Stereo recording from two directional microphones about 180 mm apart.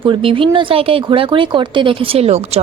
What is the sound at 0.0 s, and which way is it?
A woman's voice, 30° right (ahead or behind).